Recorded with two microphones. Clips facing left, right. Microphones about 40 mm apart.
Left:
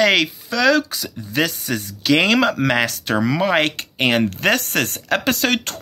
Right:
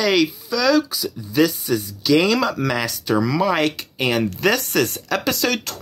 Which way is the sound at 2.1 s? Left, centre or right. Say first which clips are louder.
Left 1 dB; left.